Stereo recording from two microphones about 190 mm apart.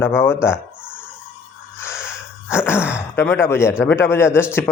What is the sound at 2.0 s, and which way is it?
Sneeze, 10° left (ahead or behind).